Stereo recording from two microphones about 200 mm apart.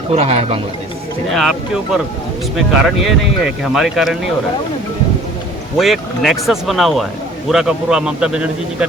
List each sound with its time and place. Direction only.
0.1 s speech: 30° right (ahead or behind)
1.3 s speech: centre (ahead or behind)
5.7 s speech: centre (ahead or behind)